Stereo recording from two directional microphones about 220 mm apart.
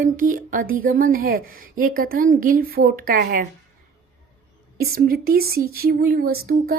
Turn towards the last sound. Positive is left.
turn(degrees=-45)  # may be behind; listen again after turning